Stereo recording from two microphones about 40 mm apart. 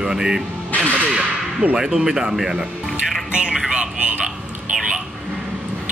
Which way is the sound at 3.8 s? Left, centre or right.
Right.